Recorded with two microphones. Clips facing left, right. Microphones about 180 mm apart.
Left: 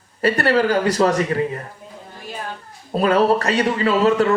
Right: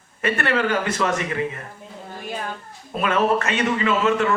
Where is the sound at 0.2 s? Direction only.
35° left (ahead or behind).